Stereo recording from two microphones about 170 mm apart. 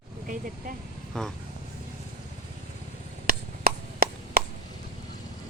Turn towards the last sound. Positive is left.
turn(degrees=-60)  # may be behind; listen again after turning